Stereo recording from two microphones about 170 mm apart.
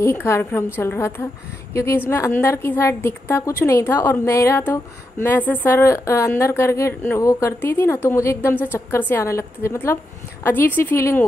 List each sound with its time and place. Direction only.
0.0 s a woman's voice: 15° left (ahead or behind)